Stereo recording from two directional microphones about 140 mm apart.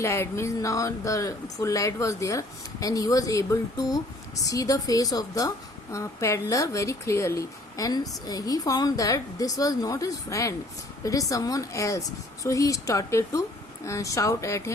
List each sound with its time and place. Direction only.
0.0 s speech: 20° left (ahead or behind)